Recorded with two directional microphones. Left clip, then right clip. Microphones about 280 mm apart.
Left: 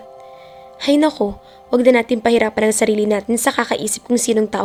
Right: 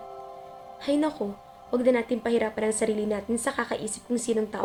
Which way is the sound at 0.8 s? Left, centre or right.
Left.